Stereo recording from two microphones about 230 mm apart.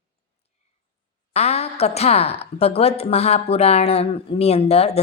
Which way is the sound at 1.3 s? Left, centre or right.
Left.